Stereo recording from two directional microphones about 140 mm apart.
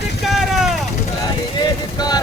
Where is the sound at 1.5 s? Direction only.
30° left (ahead or behind).